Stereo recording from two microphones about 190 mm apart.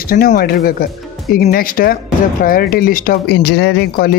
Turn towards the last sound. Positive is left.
turn(degrees=55)  # may be behind; listen again after turning